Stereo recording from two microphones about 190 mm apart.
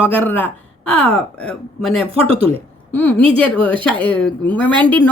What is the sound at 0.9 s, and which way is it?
A woman's voice, 5° left (ahead or behind).